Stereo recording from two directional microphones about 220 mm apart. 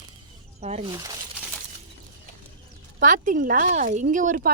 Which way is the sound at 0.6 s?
30° right (ahead or behind).